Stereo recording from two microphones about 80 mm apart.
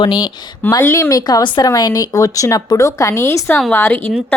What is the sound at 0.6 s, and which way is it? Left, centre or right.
Speech, left.